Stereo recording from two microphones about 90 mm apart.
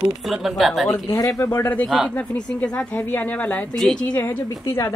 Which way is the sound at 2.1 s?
15° left (ahead or behind).